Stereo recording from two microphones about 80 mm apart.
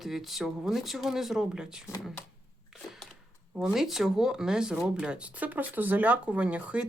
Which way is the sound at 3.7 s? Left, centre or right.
Centre.